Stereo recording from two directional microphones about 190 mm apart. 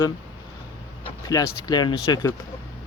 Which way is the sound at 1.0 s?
20° left (ahead or behind).